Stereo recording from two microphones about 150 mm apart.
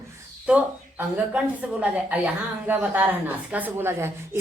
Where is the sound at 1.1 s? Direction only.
10° right (ahead or behind).